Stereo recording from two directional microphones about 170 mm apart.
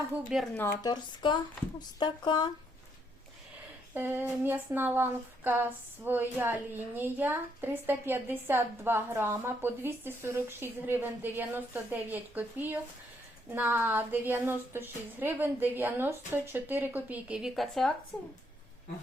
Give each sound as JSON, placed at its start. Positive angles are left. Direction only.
{"t": 0.1, "sound": "speech", "side_deg": -5}
{"t": 0.5, "sound": "speech", "side_deg": 15}
{"t": 3.9, "sound": "speech", "side_deg": -10}